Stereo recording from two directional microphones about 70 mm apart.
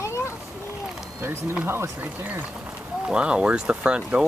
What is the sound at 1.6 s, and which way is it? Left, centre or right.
Speech, right.